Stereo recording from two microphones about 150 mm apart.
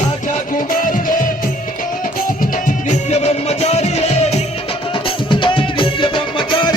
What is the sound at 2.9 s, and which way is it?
Music, 50° left (ahead or behind).